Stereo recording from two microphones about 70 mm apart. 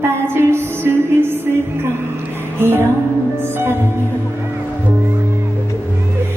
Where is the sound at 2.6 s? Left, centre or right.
Right.